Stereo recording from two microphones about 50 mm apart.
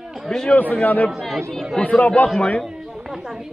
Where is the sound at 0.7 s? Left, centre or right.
Left.